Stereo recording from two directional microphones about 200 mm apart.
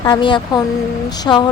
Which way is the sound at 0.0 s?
20° left (ahead or behind).